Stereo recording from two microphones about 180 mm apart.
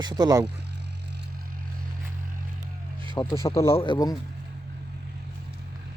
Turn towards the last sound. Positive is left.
turn(degrees=20)  # may be behind; listen again after turning